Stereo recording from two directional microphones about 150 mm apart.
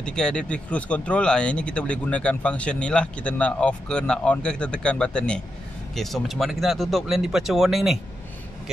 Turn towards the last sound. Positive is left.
turn(degrees=0)  # may be behind; listen again after turning